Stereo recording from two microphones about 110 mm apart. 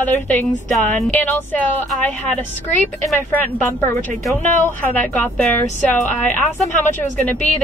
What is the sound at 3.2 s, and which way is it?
Speech, 20° left (ahead or behind).